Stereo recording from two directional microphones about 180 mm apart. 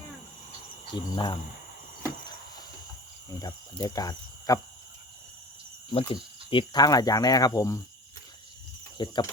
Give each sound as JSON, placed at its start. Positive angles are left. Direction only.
{"t": 0.9, "sound": "speech", "side_deg": 25}
{"t": 2.0, "sound": "a sound", "side_deg": 20}
{"t": 3.2, "sound": "speech", "side_deg": 20}
{"t": 5.9, "sound": "speech", "side_deg": 30}
{"t": 9.0, "sound": "speech", "side_deg": 25}